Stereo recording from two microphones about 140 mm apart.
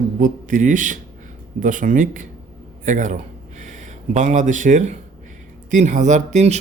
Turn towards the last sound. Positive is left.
turn(degrees=-55)  # may be behind; listen again after turning